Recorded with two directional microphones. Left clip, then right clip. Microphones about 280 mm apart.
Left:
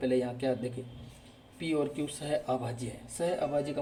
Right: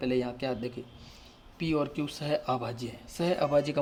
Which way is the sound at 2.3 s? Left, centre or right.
Right.